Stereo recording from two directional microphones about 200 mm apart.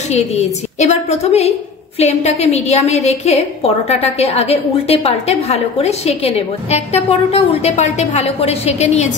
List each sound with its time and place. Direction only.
0.1 s a woman's voice: 35° left (ahead or behind)